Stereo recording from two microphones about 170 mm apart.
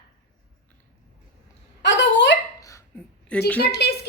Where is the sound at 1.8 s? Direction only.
90° left.